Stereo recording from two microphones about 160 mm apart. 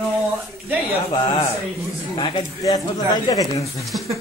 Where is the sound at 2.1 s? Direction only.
35° left (ahead or behind).